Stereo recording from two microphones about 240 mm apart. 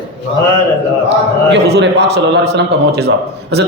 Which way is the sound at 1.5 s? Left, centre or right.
Right.